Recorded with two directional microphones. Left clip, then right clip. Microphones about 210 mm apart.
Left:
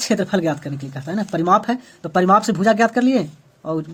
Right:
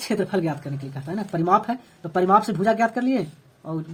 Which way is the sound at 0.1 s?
35° left (ahead or behind).